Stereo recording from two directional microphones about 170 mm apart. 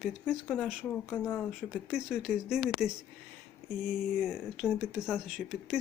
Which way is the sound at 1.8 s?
5° right (ahead or behind).